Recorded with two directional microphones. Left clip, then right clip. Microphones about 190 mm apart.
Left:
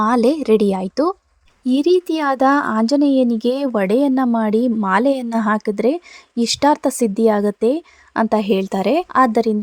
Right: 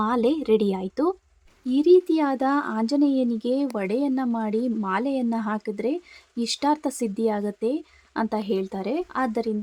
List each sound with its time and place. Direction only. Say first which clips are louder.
0.0 s a woman's voice: left 7 dB; 30° left (ahead or behind)